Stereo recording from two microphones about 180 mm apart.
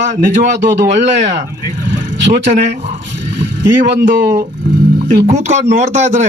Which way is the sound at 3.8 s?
60° right (ahead or behind).